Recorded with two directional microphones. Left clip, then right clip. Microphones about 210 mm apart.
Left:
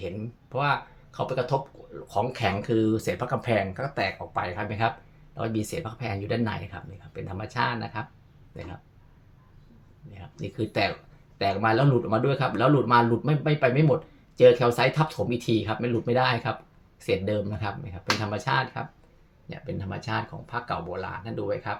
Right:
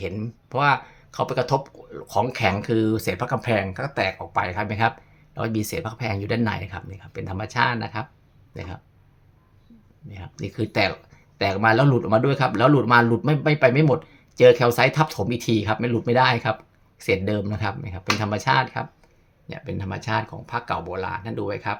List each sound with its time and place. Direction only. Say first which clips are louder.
0.0 s speech: right 4 dB; 40° right (ahead or behind)
10.1 s speech: right 4 dB; 30° right (ahead or behind)